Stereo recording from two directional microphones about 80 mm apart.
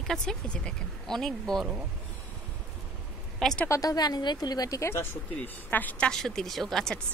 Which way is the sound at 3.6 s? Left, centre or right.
Left.